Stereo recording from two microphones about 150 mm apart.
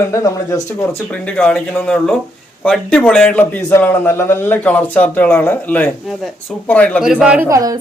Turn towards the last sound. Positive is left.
turn(degrees=-25)  # may be behind; listen again after turning